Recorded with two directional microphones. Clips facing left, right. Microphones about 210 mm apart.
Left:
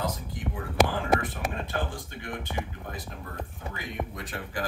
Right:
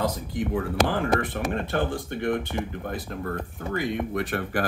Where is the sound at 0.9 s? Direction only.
65° right (ahead or behind).